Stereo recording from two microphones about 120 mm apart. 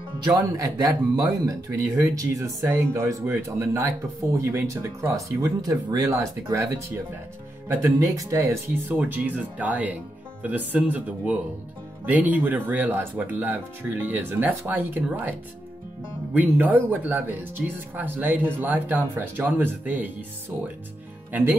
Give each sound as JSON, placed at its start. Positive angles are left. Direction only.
{"t": 0.6, "sound": "speech", "side_deg": -30}
{"t": 16.3, "sound": "speech", "side_deg": -15}